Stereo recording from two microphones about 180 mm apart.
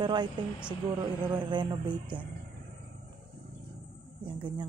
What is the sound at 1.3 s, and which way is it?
Speech, 25° right (ahead or behind).